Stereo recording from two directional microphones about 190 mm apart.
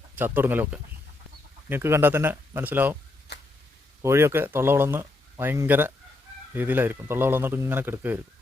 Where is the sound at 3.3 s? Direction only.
60° left (ahead or behind).